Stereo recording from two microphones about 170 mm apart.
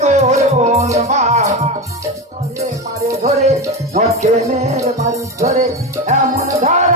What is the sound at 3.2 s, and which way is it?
Music, 40° right (ahead or behind).